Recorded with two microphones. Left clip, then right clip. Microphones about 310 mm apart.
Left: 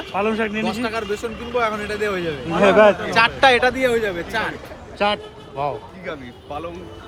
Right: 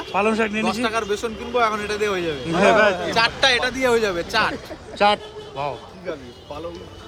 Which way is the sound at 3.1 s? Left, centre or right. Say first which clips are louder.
Left 3 dB; centre.